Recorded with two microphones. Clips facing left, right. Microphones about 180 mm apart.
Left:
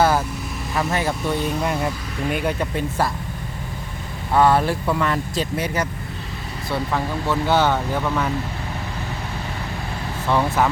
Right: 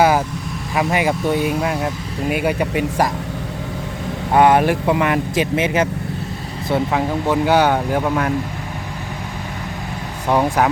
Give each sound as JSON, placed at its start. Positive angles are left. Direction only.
{"t": 0.8, "sound": "speech", "side_deg": -15}
{"t": 4.4, "sound": "speech", "side_deg": -15}
{"t": 10.2, "sound": "speech", "side_deg": -15}